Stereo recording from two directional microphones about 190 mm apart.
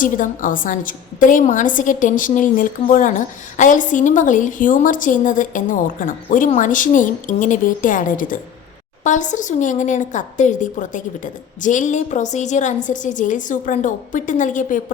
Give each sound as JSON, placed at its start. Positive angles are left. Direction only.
{"t": 0.0, "sound": "a woman's voice", "side_deg": 45}